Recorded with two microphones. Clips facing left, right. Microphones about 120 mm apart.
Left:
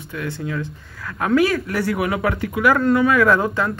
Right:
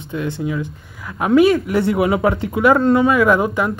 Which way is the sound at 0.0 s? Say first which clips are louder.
Right 5 dB; 25° right (ahead or behind).